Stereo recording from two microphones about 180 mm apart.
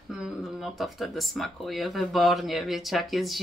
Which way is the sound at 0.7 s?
Centre (ahead or behind).